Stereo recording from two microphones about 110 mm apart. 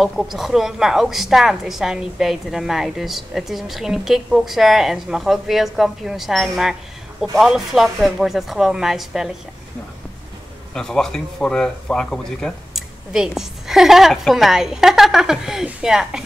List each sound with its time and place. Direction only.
0.0 s a woman's voice: centre (ahead or behind)
10.7 s a woman's voice: 5° left (ahead or behind)
13.1 s a woman's voice: 5° right (ahead or behind)